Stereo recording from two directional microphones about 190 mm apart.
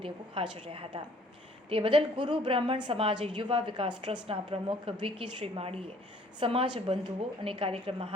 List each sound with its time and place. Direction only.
0.5 s a woman's voice: 30° right (ahead or behind)